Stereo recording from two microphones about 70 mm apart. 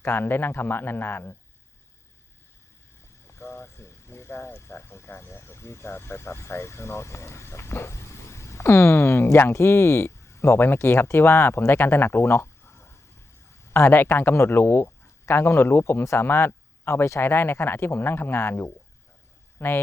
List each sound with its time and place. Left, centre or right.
0.0 s speech: left
3.2 s speech: left